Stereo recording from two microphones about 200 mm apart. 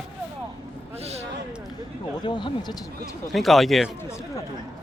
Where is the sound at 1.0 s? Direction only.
30° right (ahead or behind).